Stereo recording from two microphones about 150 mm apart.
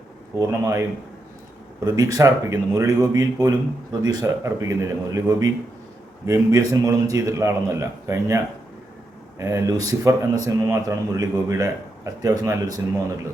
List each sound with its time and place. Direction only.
0.3 s speech: 20° right (ahead or behind)
9.4 s speech: 20° right (ahead or behind)